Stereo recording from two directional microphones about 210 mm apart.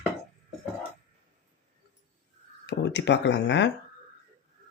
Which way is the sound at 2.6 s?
55° left (ahead or behind).